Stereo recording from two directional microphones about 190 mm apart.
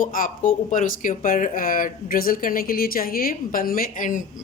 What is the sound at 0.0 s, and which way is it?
A woman's voice, 45° left (ahead or behind).